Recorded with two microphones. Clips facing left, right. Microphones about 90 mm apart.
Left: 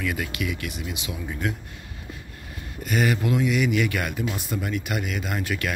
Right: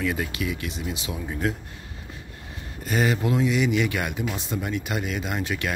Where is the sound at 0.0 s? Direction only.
30° right (ahead or behind).